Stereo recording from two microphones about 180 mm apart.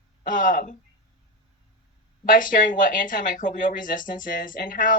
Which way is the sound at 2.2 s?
50° left (ahead or behind).